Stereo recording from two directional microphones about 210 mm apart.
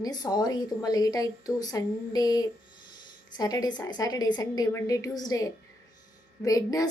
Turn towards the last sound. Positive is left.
turn(degrees=15)  # may be behind; listen again after turning